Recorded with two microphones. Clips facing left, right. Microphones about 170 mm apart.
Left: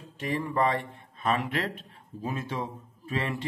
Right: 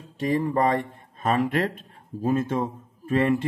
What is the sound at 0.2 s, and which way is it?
A man's voice, 35° right (ahead or behind).